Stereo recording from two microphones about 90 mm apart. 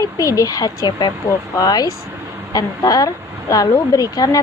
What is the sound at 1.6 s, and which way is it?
A woman's voice, 45° left (ahead or behind).